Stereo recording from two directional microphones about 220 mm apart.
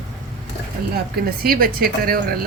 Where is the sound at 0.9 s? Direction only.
45° right (ahead or behind).